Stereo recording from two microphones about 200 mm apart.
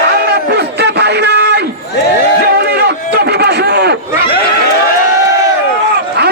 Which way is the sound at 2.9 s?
55° right (ahead or behind).